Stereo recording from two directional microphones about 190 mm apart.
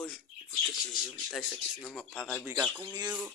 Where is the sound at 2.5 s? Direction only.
15° right (ahead or behind).